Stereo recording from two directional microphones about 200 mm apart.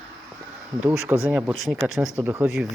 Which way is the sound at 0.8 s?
10° right (ahead or behind).